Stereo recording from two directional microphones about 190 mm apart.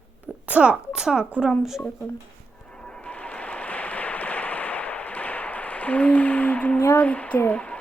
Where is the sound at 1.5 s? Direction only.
Centre (ahead or behind).